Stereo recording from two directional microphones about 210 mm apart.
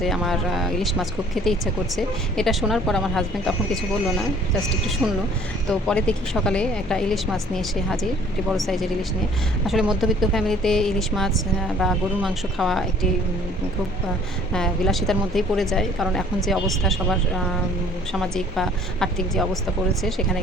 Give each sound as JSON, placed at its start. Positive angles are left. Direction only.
{"t": 0.0, "sound": "a woman's voice", "side_deg": 0}
{"t": 5.9, "sound": "a woman's voice", "side_deg": 5}
{"t": 14.5, "sound": "a woman's voice", "side_deg": 0}